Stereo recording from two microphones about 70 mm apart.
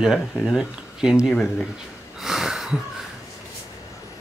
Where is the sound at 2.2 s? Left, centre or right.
Centre.